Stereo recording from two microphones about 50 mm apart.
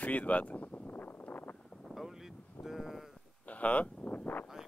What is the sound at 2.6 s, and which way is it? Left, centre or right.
Sheep, centre.